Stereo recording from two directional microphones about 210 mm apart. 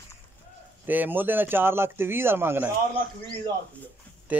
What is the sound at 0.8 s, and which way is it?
Speech, 10° right (ahead or behind).